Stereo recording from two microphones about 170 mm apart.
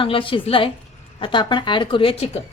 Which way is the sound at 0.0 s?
30° left (ahead or behind).